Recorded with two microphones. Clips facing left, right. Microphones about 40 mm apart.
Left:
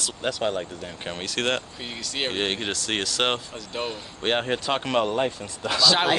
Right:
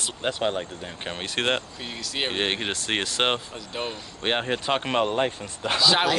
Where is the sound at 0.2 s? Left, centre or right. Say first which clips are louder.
Even; right.